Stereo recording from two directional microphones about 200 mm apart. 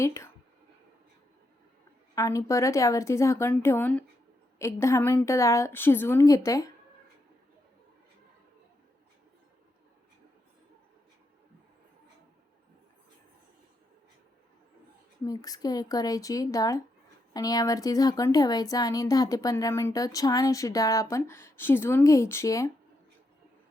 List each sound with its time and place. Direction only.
0.0 s speech: 15° left (ahead or behind)
2.1 s speech: 15° left (ahead or behind)
15.3 s speech: 15° left (ahead or behind)